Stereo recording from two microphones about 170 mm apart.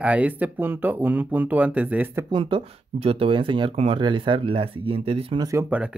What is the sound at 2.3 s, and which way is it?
Speech, 30° right (ahead or behind).